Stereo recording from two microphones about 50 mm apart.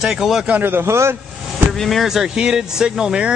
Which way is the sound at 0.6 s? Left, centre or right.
Right.